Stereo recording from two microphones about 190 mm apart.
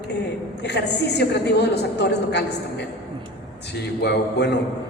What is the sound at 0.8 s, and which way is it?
A woman's voice, 60° left (ahead or behind).